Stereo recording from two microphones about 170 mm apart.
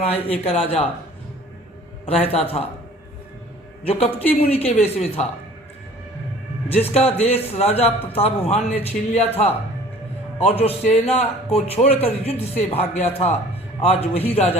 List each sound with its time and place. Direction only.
0.0 s a man's voice: 35° left (ahead or behind)
2.0 s a man's voice: 35° left (ahead or behind)
4.3 s a man's voice: 35° left (ahead or behind)
6.7 s a man's voice: 35° left (ahead or behind)
10.4 s a man's voice: 35° left (ahead or behind)